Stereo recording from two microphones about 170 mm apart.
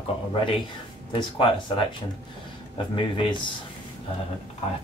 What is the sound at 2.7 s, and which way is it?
Speech, 30° left (ahead or behind).